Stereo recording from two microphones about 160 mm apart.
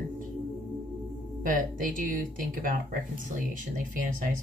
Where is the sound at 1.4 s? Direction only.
60° right (ahead or behind).